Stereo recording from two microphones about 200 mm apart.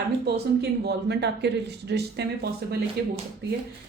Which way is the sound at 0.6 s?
55° right (ahead or behind).